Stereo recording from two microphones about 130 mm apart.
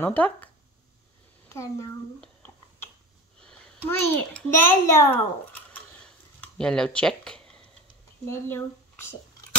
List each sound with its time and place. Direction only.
0.0 s speech: 10° left (ahead or behind)
1.5 s speech: 20° left (ahead or behind)
2.1 s a sound: 5° left (ahead or behind)
3.8 s a child's voice: 15° left (ahead or behind)
8.3 s speech: 20° left (ahead or behind)